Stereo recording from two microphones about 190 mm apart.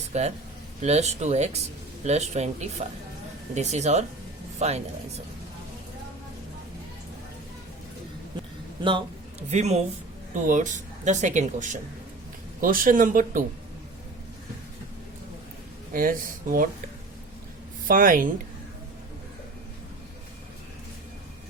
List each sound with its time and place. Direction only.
0.1 s speech: 35° right (ahead or behind)
9.5 s speech: 35° right (ahead or behind)
15.9 s speech: 50° right (ahead or behind)
17.8 s speech: 45° right (ahead or behind)